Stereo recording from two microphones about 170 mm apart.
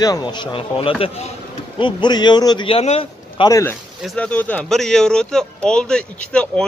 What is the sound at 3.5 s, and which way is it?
Speech, 15° left (ahead or behind).